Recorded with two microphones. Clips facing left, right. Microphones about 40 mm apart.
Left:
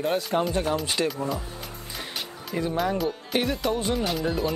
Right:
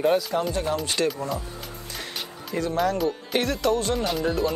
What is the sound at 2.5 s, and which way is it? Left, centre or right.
Speech, centre.